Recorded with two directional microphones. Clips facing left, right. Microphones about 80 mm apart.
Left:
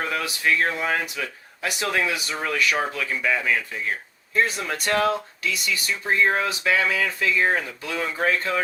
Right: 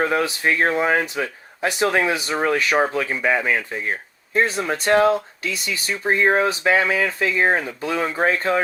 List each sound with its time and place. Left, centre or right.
0.0 s speech: right